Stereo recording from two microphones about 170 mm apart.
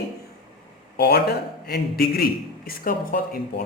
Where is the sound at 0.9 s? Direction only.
70° left (ahead or behind).